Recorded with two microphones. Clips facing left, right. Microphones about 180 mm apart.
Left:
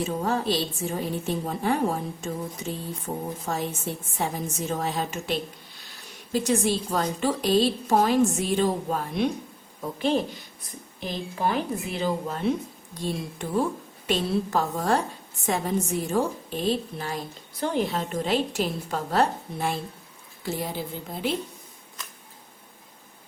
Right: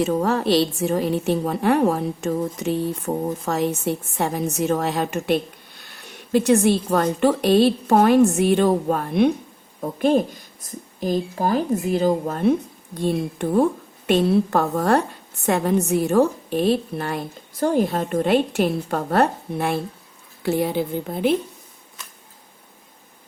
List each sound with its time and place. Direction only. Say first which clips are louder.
0.0 s a woman's voice: right 6 dB; 70° right (ahead or behind)